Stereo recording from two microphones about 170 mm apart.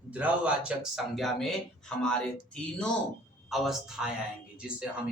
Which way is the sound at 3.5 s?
Centre (ahead or behind).